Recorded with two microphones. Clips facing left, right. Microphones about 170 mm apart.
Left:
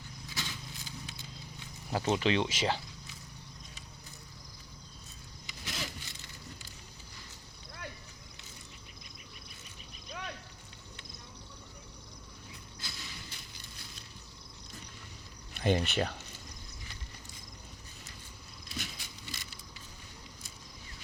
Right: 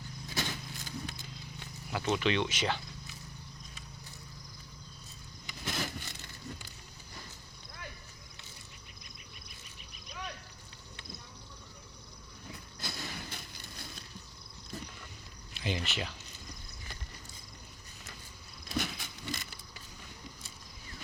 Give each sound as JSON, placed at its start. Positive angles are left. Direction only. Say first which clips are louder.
{"t": 0.3, "sound": "vehicle", "louder": "right 5 dB", "side_deg": -50}
{"t": 1.9, "sound": "speech", "louder": "left 2 dB", "side_deg": 30}
{"t": 5.5, "sound": "vehicle", "louder": "right 4 dB", "side_deg": -55}
{"t": 12.8, "sound": "a sound", "louder": "right 7 dB", "side_deg": -55}
{"t": 15.5, "sound": "speech", "louder": "left 7 dB", "side_deg": 55}
{"t": 18.7, "sound": "keys jangling", "louder": "right 8 dB", "side_deg": -55}